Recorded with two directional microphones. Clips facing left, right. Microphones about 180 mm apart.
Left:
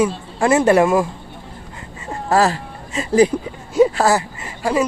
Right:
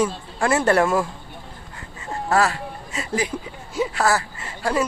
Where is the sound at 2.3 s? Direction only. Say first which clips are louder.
Left 4 dB; 35° left (ahead or behind).